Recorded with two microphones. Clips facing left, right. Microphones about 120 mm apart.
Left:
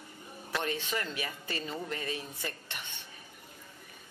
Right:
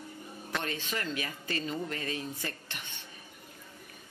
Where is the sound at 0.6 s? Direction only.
20° left (ahead or behind).